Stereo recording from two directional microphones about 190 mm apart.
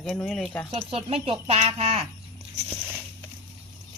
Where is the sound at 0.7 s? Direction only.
30° right (ahead or behind).